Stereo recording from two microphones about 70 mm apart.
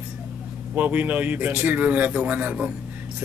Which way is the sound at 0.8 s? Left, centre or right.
Right.